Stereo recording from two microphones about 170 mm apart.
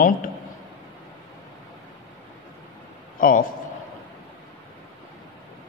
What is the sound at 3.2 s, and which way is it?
Speech, 55° left (ahead or behind).